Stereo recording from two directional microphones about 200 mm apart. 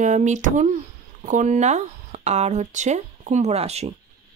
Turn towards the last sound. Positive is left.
turn(degrees=-30)  # may be behind; listen again after turning